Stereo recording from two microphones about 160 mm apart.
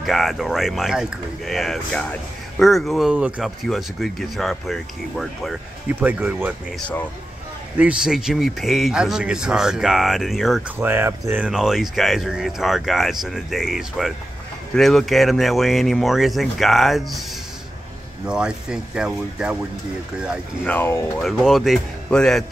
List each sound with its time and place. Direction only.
0.0 s speech: centre (ahead or behind)
5.9 s speech: 10° right (ahead or behind)
7.7 s speech: 5° right (ahead or behind)
10.8 s speech: 15° right (ahead or behind)
18.2 s speech: 5° right (ahead or behind)
20.6 s speech: 15° left (ahead or behind)
21.2 s speech: centre (ahead or behind)